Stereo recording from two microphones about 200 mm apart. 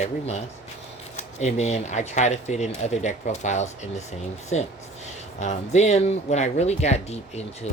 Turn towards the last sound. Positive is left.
turn(degrees=35)  # may be behind; listen again after turning